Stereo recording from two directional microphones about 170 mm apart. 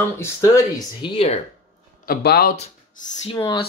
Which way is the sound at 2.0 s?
65° left (ahead or behind).